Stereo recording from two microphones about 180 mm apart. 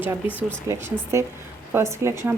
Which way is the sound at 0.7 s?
15° right (ahead or behind).